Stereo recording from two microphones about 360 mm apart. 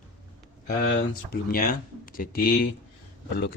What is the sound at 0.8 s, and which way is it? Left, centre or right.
Speech, left.